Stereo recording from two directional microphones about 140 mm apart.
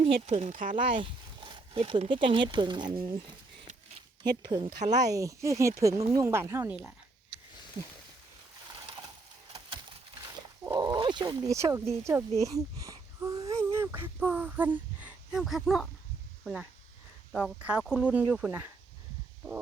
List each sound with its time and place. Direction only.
0.0 s speech: 55° right (ahead or behind); by 0.8 s 70° right (ahead or behind)
0.8 s speech: 35° right (ahead or behind); by 6.7 s 20° right (ahead or behind)
10.6 s speech: 25° right (ahead or behind)